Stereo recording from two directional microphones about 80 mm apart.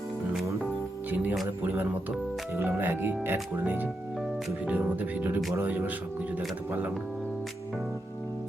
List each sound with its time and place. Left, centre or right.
1.1 s music: right
1.6 s speech: right